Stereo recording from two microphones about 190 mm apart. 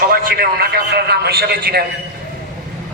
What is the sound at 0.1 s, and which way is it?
A man's voice, 50° right (ahead or behind).